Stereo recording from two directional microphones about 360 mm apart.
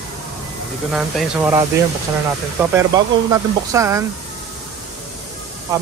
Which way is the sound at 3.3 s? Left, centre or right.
Centre.